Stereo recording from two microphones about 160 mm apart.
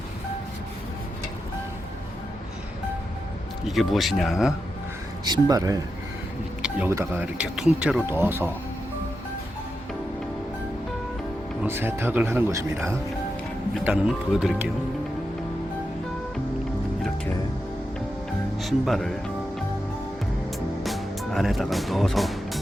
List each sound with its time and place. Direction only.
3.7 s speech: centre (ahead or behind)
5.2 s speech: 25° right (ahead or behind)
6.6 s a sound: 5° right (ahead or behind)
6.9 s speech: 15° right (ahead or behind)
11.6 s speech: 15° right (ahead or behind)
13.9 s speech: centre (ahead or behind)
18.6 s speech: centre (ahead or behind)
20.8 s music: centre (ahead or behind)